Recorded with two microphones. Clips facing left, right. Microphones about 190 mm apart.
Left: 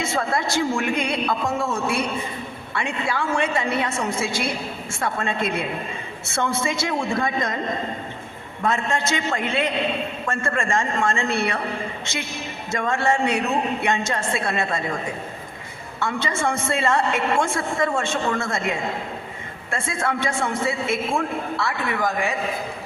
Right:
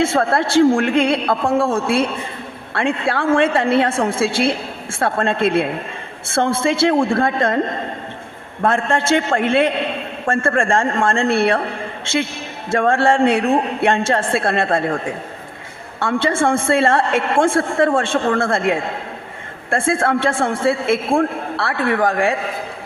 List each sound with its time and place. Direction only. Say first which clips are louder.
0.0 s a man's voice: right 7 dB; 55° right (ahead or behind)
2.7 s a man's voice: right 6 dB; 55° right (ahead or behind)
8.6 s a woman's voice: right 6 dB; 55° right (ahead or behind)
12.7 s a woman's voice: right 7 dB; 55° right (ahead or behind)